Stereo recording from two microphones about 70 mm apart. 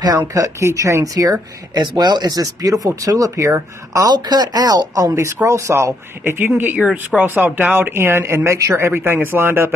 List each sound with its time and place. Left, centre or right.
0.3 s speech: right
1.0 s speech: right
1.8 s speech: right
4.1 s speech: right
5.1 s speech: right
6.8 s speech: centre
7.2 s speech: right